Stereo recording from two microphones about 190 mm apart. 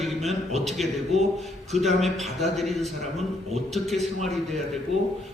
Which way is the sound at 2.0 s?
Centre (ahead or behind).